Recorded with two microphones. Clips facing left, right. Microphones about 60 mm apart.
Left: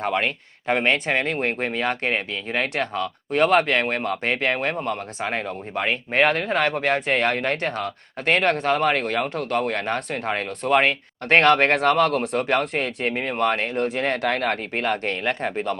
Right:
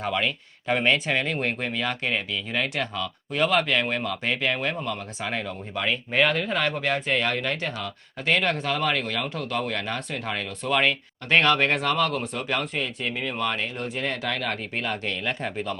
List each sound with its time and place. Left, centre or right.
0.0 s speech: left